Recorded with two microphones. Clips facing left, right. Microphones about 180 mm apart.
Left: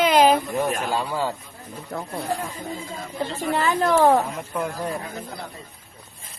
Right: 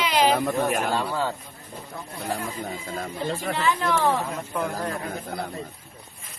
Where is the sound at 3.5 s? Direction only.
45° left (ahead or behind).